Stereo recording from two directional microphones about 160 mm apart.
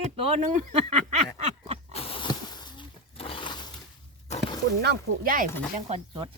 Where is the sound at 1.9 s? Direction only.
35° left (ahead or behind).